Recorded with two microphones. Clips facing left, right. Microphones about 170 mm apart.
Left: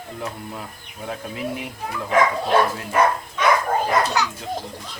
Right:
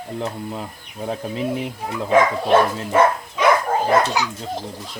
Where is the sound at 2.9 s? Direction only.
20° right (ahead or behind).